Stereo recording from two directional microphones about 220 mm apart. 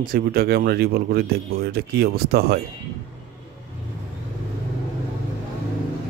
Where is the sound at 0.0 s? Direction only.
40° right (ahead or behind).